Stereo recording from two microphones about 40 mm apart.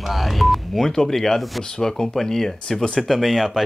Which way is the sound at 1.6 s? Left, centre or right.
Centre.